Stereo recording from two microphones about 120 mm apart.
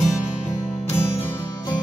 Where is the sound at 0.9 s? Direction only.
20° left (ahead or behind).